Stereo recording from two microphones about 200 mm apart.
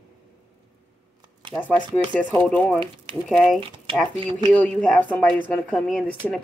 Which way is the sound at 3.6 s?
25° right (ahead or behind).